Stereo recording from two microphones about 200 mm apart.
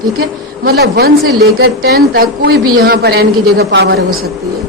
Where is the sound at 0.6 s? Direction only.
55° right (ahead or behind).